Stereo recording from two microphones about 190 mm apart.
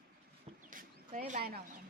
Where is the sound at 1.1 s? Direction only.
40° right (ahead or behind).